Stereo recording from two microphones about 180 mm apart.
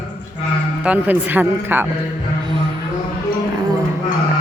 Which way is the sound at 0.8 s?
10° right (ahead or behind).